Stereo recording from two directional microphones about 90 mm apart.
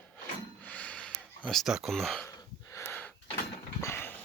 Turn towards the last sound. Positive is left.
turn(degrees=30)  # may be behind; listen again after turning